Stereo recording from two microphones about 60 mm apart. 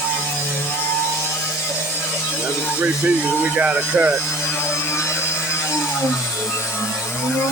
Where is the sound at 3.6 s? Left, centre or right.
Right.